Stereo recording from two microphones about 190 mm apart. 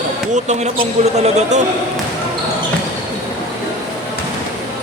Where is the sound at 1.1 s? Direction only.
35° right (ahead or behind).